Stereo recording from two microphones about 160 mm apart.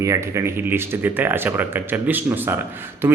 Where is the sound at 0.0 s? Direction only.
20° right (ahead or behind).